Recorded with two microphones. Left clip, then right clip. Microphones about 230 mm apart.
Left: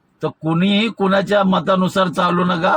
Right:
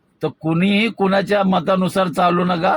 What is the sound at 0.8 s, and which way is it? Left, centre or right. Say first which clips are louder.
A man's voice: even; left.